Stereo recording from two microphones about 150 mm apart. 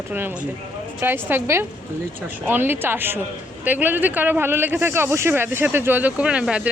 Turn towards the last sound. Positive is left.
turn(degrees=-5)  # may be behind; listen again after turning